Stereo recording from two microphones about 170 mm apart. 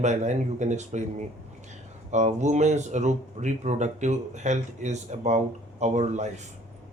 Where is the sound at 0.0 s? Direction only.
45° right (ahead or behind).